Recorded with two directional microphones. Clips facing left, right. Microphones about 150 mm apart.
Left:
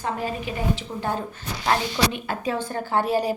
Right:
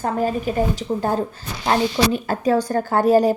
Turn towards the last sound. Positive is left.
turn(degrees=-45)  # may be behind; listen again after turning